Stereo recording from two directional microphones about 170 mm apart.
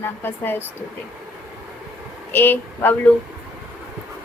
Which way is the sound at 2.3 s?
10° left (ahead or behind).